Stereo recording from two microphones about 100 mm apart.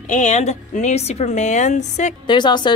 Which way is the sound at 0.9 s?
90° left.